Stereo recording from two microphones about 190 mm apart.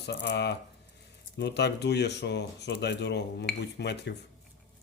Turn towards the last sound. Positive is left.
turn(degrees=65)  # may be behind; listen again after turning